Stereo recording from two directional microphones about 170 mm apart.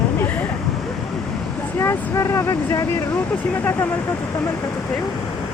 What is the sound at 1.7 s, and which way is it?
Speech, 15° left (ahead or behind).